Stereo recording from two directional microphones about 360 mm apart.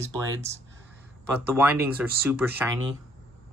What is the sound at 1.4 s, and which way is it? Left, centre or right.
Speech, centre.